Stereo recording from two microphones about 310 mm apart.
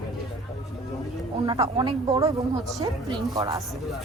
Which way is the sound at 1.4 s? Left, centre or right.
Centre.